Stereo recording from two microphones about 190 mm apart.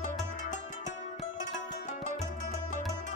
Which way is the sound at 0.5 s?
40° left (ahead or behind).